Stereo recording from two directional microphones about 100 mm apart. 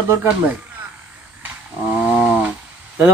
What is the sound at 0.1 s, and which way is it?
Speech, 25° right (ahead or behind).